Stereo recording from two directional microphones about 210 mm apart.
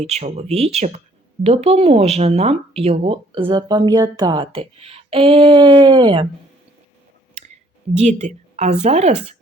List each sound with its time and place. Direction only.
0.0 s speech: 30° right (ahead or behind)
7.9 s speech: 35° right (ahead or behind)